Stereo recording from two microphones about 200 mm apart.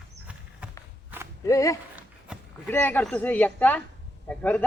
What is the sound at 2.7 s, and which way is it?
Speech, 10° left (ahead or behind).